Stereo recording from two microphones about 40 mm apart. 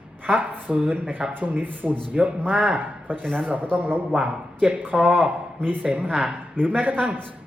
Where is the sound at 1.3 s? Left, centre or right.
Right.